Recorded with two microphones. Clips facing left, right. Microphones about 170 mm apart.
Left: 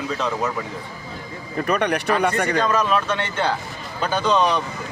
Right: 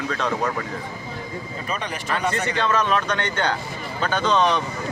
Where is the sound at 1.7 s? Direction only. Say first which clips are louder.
Left 9 dB; 65° left (ahead or behind).